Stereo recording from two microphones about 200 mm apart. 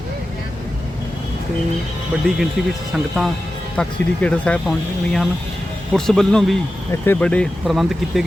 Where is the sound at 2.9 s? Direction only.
Centre (ahead or behind).